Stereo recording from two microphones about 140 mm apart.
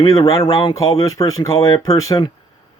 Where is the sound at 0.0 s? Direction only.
25° left (ahead or behind).